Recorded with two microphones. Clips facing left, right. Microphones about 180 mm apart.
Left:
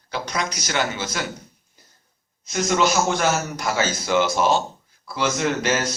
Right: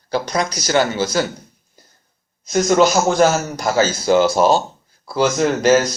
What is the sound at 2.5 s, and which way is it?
Speech, 40° right (ahead or behind).